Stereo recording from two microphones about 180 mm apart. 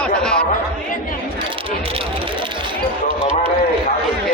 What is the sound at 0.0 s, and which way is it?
Chatter, 5° left (ahead or behind).